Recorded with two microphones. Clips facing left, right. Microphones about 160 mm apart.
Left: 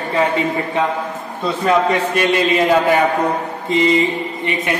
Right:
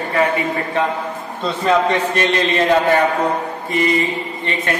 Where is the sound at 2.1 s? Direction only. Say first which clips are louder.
Left 2 dB; 10° left (ahead or behind).